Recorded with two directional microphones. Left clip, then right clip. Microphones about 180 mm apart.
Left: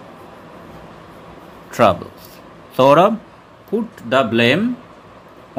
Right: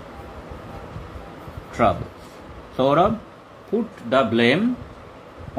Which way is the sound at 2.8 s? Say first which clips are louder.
Left 7 dB; 50° left (ahead or behind).